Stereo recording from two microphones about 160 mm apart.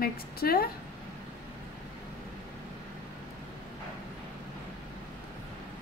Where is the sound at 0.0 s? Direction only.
70° left (ahead or behind).